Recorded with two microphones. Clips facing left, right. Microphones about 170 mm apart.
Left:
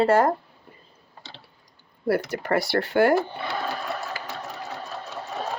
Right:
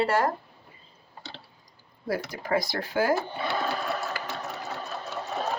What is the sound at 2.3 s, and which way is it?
Speech, 75° left (ahead or behind).